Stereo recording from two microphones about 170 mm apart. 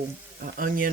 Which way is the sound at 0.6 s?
55° right (ahead or behind).